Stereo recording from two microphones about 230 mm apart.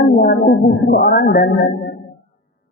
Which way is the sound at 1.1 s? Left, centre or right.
Left.